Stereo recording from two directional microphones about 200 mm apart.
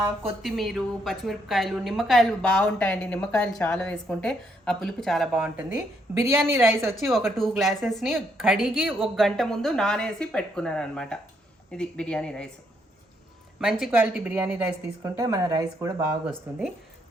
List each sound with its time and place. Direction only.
0.4 s a woman's voice: centre (ahead or behind)
6.1 s speech: 10° right (ahead or behind)
6.9 s a woman's voice: centre (ahead or behind)
13.6 s speech: centre (ahead or behind); by 15.9 s 20° right (ahead or behind)
16.2 s a woman's voice: 5° right (ahead or behind)